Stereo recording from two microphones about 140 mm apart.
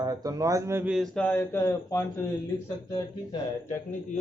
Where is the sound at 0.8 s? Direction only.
Centre (ahead or behind); by 2.3 s 20° left (ahead or behind).